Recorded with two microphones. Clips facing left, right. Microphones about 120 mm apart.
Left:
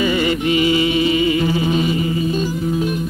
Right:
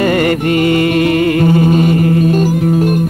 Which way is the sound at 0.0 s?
60° right (ahead or behind).